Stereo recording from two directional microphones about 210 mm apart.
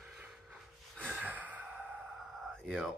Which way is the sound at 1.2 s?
10° right (ahead or behind).